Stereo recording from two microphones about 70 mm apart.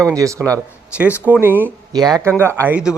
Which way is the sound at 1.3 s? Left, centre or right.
Right.